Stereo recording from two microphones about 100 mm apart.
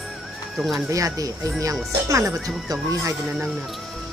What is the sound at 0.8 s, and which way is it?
Speech, 35° right (ahead or behind).